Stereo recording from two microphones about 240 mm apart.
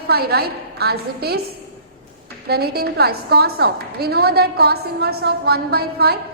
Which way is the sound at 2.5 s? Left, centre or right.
Right.